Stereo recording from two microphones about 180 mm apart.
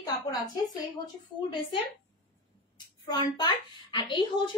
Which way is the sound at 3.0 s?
25° left (ahead or behind).